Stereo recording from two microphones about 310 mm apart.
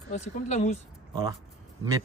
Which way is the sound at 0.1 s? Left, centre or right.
Left.